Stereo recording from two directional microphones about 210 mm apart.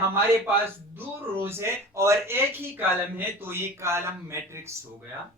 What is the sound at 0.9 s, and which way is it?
Speech, 10° right (ahead or behind).